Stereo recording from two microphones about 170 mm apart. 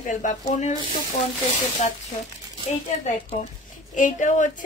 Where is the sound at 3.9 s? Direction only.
50° left (ahead or behind).